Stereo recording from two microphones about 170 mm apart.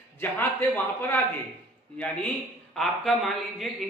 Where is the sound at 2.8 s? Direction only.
Centre (ahead or behind).